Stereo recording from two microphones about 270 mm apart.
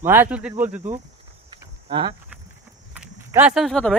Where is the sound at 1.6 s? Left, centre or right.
Centre.